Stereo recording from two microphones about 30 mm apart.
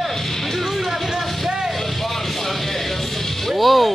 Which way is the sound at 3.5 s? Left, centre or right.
Centre.